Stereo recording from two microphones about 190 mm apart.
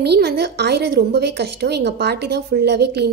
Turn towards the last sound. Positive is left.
turn(degrees=-60)  # may be behind; listen again after turning